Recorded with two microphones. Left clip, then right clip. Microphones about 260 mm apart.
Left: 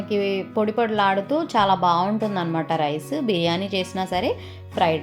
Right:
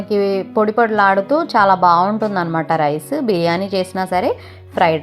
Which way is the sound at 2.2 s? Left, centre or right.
Centre.